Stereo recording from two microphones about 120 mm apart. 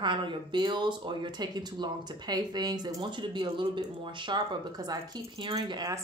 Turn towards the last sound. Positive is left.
turn(degrees=-35)  # may be behind; listen again after turning